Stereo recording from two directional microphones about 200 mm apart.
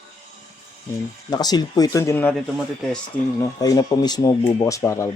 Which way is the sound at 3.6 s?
20° left (ahead or behind).